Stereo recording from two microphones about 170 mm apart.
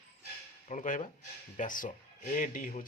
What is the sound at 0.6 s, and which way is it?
Speech, 45° left (ahead or behind).